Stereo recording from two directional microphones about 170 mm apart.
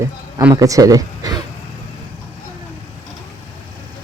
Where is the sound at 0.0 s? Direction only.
15° right (ahead or behind).